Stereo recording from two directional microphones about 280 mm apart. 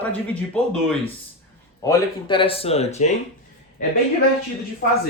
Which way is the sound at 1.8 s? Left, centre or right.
Centre.